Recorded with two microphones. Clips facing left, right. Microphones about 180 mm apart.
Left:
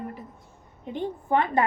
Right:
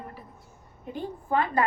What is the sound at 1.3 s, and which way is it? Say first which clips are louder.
Speech: left 2 dB; 25° left (ahead or behind).